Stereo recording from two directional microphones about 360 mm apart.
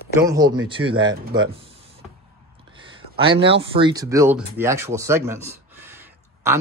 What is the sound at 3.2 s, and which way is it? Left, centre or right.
Speech, centre.